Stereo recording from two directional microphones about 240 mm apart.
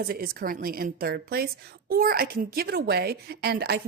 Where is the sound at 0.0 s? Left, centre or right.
Right.